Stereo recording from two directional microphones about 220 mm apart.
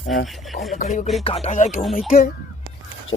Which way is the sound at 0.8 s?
30° left (ahead or behind).